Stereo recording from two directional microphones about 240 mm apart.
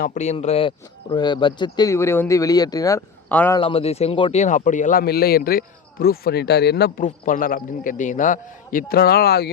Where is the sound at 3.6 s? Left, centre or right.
Left.